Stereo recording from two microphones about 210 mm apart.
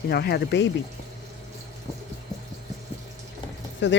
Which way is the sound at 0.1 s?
50° left (ahead or behind).